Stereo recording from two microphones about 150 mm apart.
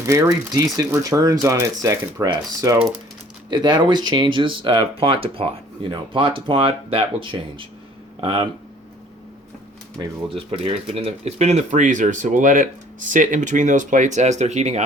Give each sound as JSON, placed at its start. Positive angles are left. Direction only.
{"t": 0.0, "sound": "speech", "side_deg": -20}
{"t": 10.0, "sound": "speech", "side_deg": -40}